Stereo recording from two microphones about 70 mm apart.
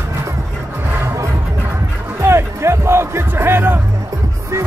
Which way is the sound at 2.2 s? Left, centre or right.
Right.